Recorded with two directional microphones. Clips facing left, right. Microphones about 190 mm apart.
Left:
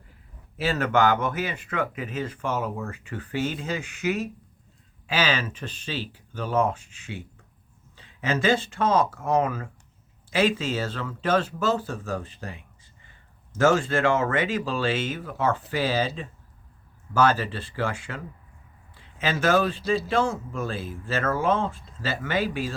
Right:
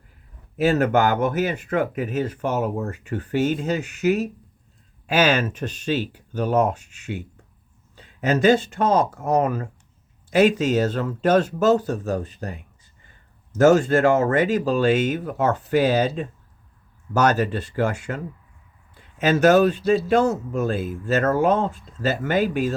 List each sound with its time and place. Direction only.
0.6 s speech: 45° right (ahead or behind)